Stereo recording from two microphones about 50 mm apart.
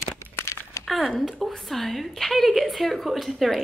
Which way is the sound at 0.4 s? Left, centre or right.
Left.